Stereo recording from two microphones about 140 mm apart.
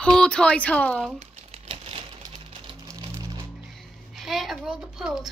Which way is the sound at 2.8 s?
20° right (ahead or behind).